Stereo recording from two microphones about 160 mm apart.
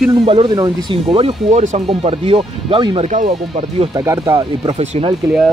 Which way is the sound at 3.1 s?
50° right (ahead or behind).